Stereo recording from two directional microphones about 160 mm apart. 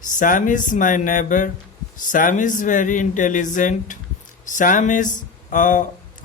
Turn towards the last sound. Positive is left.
turn(degrees=55)  # may be behind; listen again after turning